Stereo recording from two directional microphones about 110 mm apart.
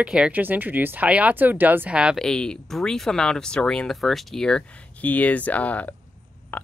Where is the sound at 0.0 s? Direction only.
10° right (ahead or behind).